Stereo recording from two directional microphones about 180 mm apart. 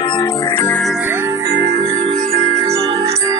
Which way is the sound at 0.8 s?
5° right (ahead or behind).